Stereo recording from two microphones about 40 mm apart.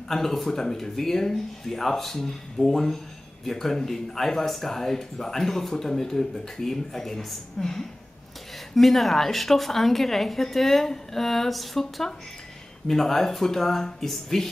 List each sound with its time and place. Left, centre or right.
0.1 s a woman's voice: centre